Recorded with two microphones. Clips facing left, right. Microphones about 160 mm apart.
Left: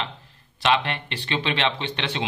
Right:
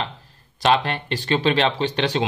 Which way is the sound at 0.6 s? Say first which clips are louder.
Right 3 dB; 40° right (ahead or behind).